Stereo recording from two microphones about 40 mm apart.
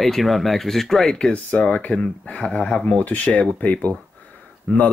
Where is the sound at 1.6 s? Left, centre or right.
Left.